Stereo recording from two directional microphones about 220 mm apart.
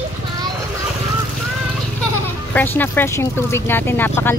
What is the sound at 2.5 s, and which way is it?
Speech, 10° left (ahead or behind).